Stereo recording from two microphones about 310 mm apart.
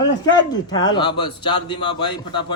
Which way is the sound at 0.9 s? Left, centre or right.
Centre.